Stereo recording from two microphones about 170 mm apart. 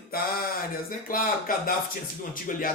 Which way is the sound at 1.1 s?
55° left (ahead or behind).